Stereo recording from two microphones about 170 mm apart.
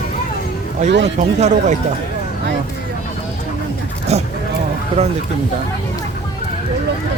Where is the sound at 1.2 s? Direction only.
45° right (ahead or behind).